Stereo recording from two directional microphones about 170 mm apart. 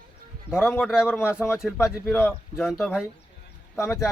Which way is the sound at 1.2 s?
15° left (ahead or behind).